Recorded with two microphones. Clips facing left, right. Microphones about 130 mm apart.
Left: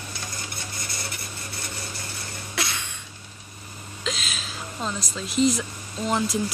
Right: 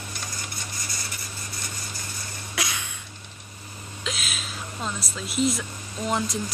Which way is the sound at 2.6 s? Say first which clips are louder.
Left 1 dB; 10° right (ahead or behind).